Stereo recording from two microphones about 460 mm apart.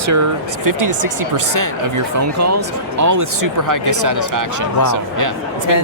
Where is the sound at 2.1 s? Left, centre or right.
Right.